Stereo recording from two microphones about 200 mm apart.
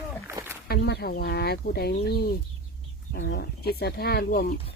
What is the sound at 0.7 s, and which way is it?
Speech, 55° left (ahead or behind).